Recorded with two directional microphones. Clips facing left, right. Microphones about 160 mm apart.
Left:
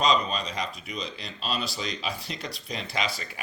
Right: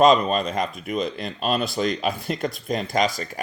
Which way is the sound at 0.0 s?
50° right (ahead or behind).